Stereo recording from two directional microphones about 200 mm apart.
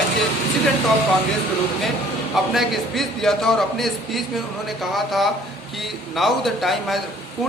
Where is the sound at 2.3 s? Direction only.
Centre (ahead or behind).